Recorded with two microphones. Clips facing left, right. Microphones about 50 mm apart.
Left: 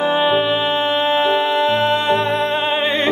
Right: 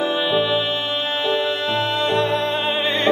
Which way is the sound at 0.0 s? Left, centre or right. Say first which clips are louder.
Left 4 dB; left.